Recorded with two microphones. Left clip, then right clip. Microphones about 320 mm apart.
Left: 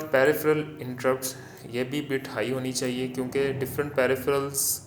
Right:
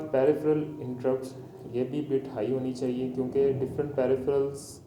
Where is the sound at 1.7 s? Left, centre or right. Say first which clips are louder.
Even; left.